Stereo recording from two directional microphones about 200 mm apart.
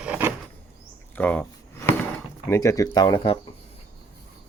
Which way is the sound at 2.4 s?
15° left (ahead or behind).